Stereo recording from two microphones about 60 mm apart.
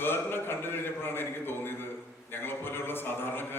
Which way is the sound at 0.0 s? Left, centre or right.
Left.